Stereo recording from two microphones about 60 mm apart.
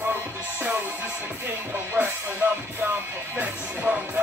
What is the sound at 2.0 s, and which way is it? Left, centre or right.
Music, right.